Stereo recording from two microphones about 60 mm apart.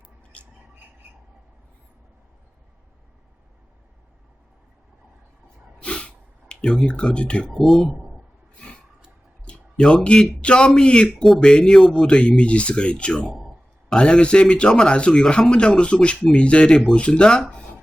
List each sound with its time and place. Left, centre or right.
5.8 s gasp: centre
7.5 s speech: centre
8.5 s a sound: centre
9.5 s a man's voice: centre
13.3 s a sound: centre
13.9 s a man's voice: centre